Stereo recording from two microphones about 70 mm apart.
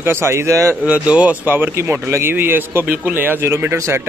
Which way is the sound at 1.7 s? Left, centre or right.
Right.